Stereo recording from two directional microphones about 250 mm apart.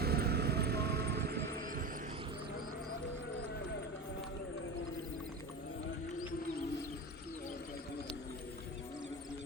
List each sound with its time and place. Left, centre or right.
0.0 s music: right